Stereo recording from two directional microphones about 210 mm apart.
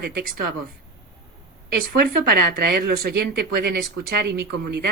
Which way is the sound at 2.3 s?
45° right (ahead or behind).